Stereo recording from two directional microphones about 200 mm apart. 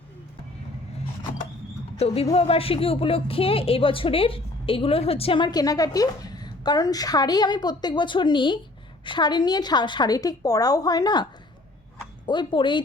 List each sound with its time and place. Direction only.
2.0 s a woman's voice: 30° left (ahead or behind)